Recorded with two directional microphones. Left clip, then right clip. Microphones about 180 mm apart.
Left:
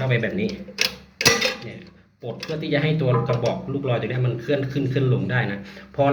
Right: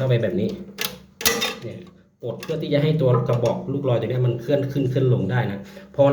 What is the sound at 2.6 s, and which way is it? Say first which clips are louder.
A man's voice: right 2 dB; 35° right (ahead or behind).